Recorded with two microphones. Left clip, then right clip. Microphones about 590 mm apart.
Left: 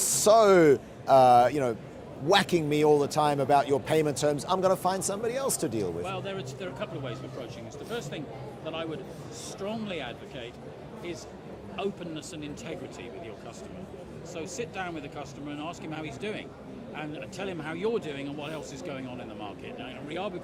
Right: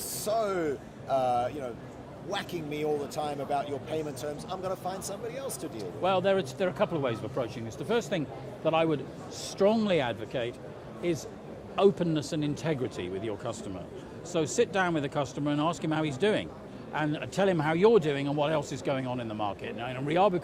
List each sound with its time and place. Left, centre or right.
0.3 s speech: left
6.0 s a man's voice: right
14.3 s a man's voice: right